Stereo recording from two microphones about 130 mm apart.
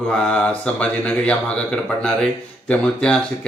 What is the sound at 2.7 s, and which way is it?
Speech, 5° left (ahead or behind).